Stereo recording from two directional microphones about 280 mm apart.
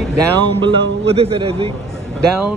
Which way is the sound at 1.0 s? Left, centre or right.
Right.